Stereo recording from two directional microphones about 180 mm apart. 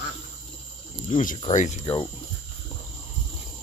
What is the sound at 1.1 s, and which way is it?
Speech, 45° left (ahead or behind).